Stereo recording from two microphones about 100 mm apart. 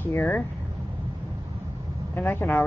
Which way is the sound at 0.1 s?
20° left (ahead or behind).